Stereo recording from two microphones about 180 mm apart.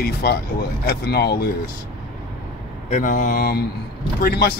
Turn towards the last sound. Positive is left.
turn(degrees=60)  # may be behind; listen again after turning